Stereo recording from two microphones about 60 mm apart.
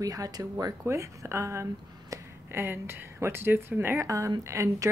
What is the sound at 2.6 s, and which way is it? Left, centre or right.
Speech, right.